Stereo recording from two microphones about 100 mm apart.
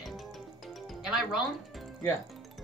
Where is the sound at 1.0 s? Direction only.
5° right (ahead or behind).